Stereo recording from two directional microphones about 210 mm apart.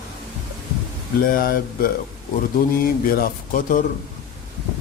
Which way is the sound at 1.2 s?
40° left (ahead or behind).